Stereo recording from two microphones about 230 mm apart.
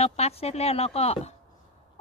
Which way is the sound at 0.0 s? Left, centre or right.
Left.